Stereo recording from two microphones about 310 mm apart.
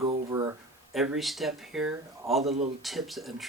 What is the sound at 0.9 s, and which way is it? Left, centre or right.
Speech, centre.